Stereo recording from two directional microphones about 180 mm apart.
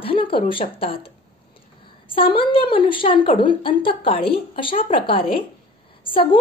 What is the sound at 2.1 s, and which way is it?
A woman's voice, 30° left (ahead or behind).